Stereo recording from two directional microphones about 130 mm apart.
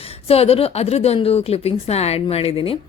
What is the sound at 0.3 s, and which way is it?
A woman's voice, 50° left (ahead or behind).